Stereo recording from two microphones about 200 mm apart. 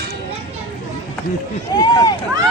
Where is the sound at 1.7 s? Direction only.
20° left (ahead or behind).